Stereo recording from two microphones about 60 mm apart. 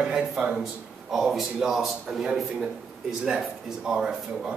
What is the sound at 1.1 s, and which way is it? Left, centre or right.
A man's voice, centre.